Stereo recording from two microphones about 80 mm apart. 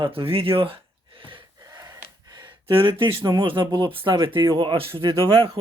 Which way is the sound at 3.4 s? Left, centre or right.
Right.